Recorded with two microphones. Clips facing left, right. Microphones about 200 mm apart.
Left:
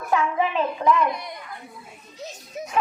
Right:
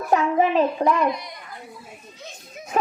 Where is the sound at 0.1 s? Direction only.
40° right (ahead or behind).